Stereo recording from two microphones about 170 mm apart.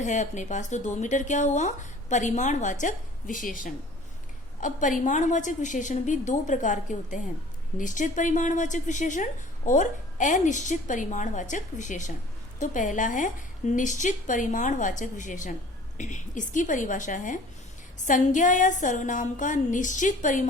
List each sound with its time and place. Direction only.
0.0 s a woman's voice: 45° left (ahead or behind)